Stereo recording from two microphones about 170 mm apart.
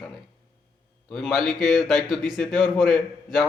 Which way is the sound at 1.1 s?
5° left (ahead or behind).